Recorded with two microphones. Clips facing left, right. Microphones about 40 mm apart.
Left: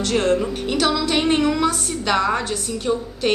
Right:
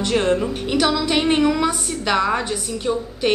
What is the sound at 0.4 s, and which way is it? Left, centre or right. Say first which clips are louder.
A woman's voice: right 1 dB; centre.